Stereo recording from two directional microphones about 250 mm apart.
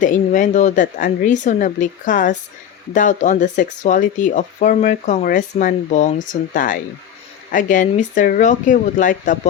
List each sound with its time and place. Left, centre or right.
0.0 s speech: left